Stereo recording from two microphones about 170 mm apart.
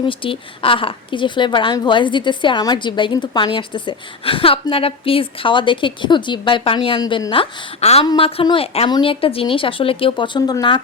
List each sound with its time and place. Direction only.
0.0 s a woman's voice: 30° left (ahead or behind)